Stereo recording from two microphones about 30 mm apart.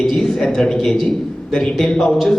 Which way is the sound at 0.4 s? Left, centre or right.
Centre.